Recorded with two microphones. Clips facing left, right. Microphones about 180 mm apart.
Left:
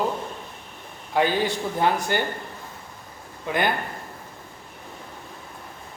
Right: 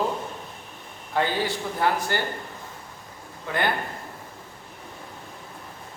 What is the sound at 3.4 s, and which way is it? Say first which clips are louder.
Speech: left 2 dB; 15° left (ahead or behind).